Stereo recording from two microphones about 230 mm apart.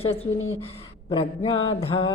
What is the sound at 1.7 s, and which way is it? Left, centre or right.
Mantra, left.